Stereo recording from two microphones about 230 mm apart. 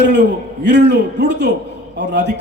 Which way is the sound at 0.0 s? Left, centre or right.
Right.